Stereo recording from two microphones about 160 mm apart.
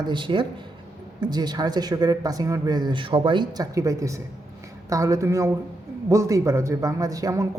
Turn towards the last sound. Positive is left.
turn(degrees=-20)  # may be behind; listen again after turning